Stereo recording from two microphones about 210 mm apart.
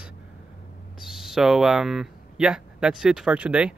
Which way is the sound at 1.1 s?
5° right (ahead or behind).